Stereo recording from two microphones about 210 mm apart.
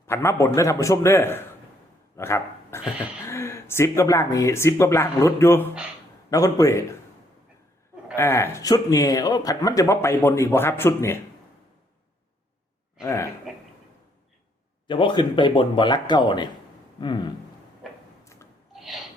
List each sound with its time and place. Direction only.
0.1 s speech: 10° left (ahead or behind)
8.1 s speech: 10° left (ahead or behind)
13.0 s speech: 15° left (ahead or behind)
14.8 s speech: 20° left (ahead or behind)
18.7 s gasp: centre (ahead or behind)